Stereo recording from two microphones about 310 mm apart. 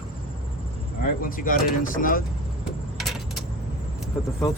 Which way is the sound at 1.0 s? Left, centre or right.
Left.